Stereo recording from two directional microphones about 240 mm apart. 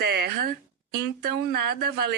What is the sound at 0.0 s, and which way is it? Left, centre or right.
Speech, right.